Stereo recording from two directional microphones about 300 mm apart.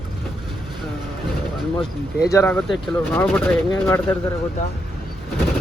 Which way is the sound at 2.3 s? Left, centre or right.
Centre.